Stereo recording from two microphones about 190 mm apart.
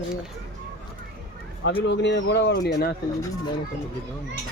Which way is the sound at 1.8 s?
65° left (ahead or behind).